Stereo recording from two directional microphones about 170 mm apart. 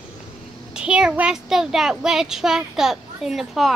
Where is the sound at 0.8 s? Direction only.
5° right (ahead or behind).